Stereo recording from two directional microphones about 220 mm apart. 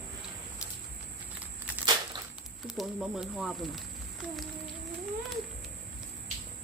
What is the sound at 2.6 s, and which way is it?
Speech, 5° right (ahead or behind).